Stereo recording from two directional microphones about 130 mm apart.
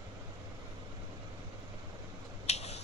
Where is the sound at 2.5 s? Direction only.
55° left (ahead or behind).